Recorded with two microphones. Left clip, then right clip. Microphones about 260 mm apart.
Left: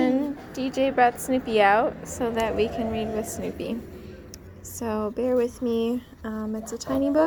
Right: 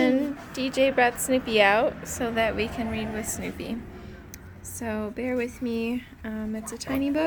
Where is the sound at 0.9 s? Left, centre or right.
Centre.